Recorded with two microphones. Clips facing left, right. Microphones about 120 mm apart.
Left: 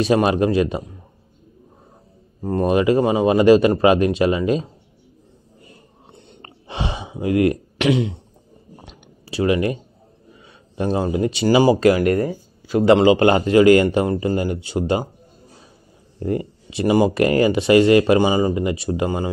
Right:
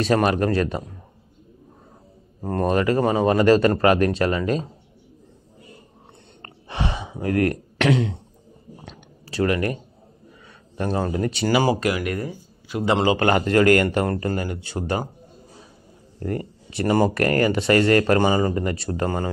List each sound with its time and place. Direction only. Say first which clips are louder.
0.0 s speech: left 3 dB; 20° left (ahead or behind)
2.5 s speech: left 4 dB; 15° left (ahead or behind)
6.4 s a sound: left 1 dB; 20° left (ahead or behind)
11.1 s speech: left 6 dB; 20° left (ahead or behind); by 12.8 s 40° left (ahead or behind)
13.1 s speech: left 4 dB; 20° left (ahead or behind)
16.2 s speech: left 5 dB; 20° left (ahead or behind)